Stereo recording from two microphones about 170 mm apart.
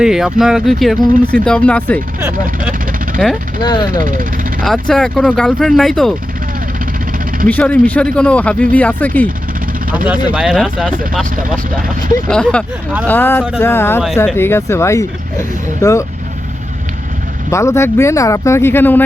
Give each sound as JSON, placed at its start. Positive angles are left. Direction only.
{"t": 0.0, "sound": "speech", "side_deg": -5}
{"t": 3.2, "sound": "speech", "side_deg": -5}
{"t": 3.6, "sound": "speech", "side_deg": 25}
{"t": 4.0, "sound": "speech", "side_deg": -50}
{"t": 4.6, "sound": "speech", "side_deg": 0}
{"t": 7.4, "sound": "speech", "side_deg": 10}
{"t": 10.3, "sound": "speech", "side_deg": -5}
{"t": 12.3, "sound": "speech", "side_deg": 5}
{"t": 17.5, "sound": "speech", "side_deg": 15}